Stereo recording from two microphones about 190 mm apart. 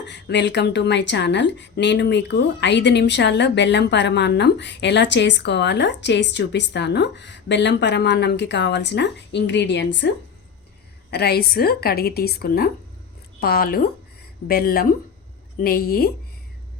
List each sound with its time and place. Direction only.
0.0 s a woman's voice: 65° left (ahead or behind)
11.1 s a woman's voice: 60° left (ahead or behind)